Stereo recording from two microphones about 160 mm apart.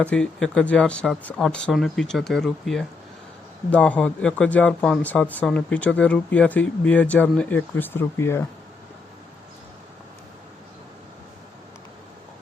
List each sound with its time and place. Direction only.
0.0 s speech: 5° left (ahead or behind)